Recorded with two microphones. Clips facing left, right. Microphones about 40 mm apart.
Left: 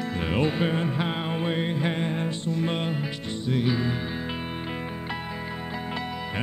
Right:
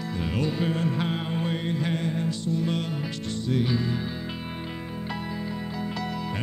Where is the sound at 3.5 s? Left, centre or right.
Centre.